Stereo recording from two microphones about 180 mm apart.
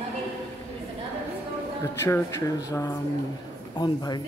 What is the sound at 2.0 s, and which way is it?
Speech, 15° left (ahead or behind).